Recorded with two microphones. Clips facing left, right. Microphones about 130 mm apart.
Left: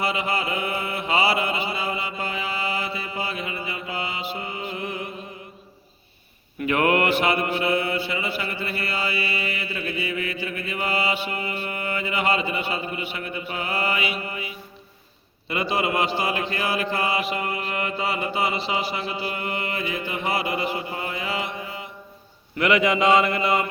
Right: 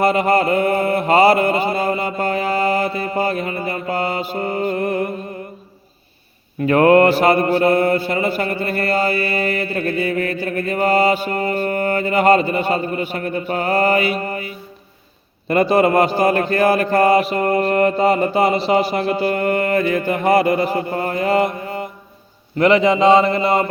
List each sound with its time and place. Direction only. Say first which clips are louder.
0.0 s mantra: right 10 dB; 45° right (ahead or behind)
6.6 s mantra: right 9 dB; 35° right (ahead or behind)
22.5 s speech: right 7 dB; 35° right (ahead or behind)